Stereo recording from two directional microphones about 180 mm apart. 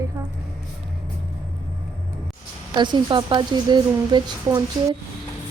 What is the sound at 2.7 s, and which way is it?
Speech, 25° right (ahead or behind).